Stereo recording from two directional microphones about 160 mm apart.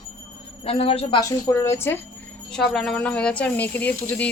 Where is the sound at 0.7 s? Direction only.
35° left (ahead or behind).